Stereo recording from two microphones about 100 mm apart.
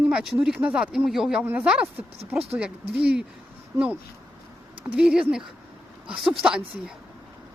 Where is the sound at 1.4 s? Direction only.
15° right (ahead or behind).